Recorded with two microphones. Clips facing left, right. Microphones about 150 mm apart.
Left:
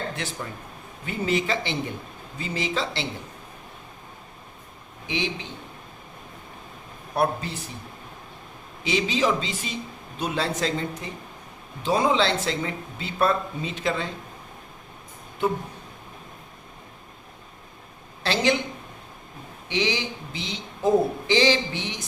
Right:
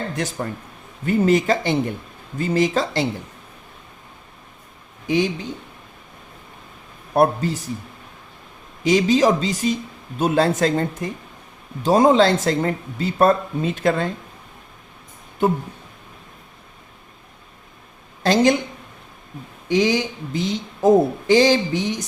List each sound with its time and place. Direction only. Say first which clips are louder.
1.0 s speech: right 9 dB; 45° right (ahead or behind)
5.0 s speech: right 9 dB; 45° right (ahead or behind)
7.1 s speech: right 7 dB; 45° right (ahead or behind)
8.8 s speech: right 8 dB; 45° right (ahead or behind)
18.2 s speech: right 7 dB; 45° right (ahead or behind)
19.6 s speech: right 8 dB; 45° right (ahead or behind)